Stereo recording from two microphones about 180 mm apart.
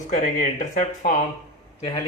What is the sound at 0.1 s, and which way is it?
Speech, 50° left (ahead or behind).